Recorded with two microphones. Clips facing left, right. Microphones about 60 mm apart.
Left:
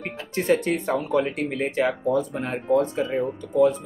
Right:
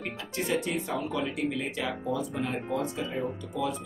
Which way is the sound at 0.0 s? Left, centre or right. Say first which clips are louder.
Left 6 dB; left.